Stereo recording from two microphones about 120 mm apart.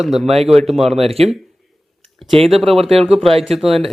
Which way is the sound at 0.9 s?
55° right (ahead or behind).